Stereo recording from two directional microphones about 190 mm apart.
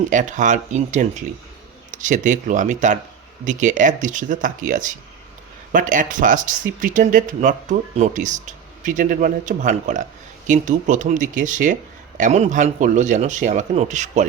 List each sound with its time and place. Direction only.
0.1 s speech: 40° right (ahead or behind)